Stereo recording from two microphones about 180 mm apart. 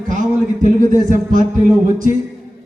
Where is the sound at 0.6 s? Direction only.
45° right (ahead or behind).